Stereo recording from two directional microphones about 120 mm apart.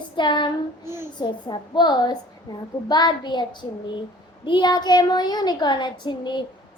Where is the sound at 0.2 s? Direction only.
40° left (ahead or behind).